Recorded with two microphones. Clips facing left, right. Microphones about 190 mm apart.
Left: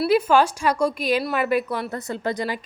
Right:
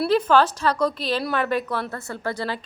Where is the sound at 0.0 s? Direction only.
10° left (ahead or behind).